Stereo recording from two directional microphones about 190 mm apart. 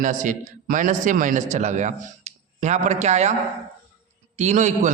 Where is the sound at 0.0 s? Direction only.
40° right (ahead or behind).